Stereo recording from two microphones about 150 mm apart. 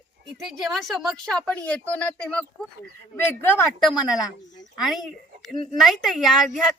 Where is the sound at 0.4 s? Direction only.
Centre (ahead or behind).